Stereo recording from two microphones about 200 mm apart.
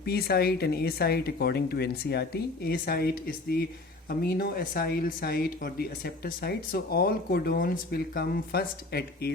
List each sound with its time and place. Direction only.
0.0 s speech: 55° left (ahead or behind)